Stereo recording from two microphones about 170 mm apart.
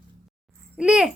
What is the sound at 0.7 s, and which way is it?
Speech, 5° right (ahead or behind).